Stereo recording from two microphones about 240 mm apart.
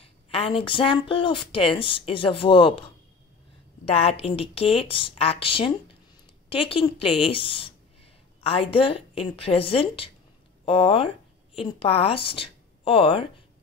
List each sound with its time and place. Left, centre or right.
0.0 s speech: left
3.8 s speech: left